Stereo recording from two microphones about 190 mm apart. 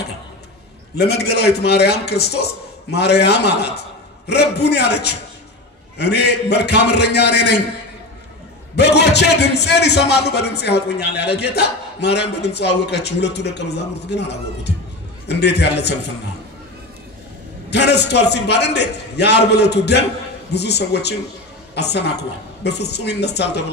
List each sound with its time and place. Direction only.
0.9 s a man's voice: 60° left (ahead or behind)
8.7 s a man's voice: 60° left (ahead or behind)
17.6 s a man's voice: 60° left (ahead or behind)